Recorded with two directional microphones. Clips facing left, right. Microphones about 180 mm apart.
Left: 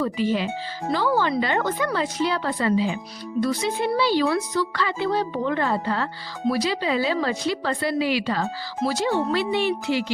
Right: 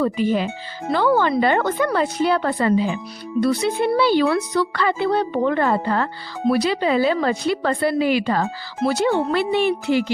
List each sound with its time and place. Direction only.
0.0 s speech: 50° right (ahead or behind)
3.4 s a woman's voice: 65° right (ahead or behind)